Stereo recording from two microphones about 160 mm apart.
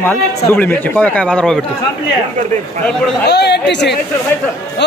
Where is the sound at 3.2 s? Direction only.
90° left.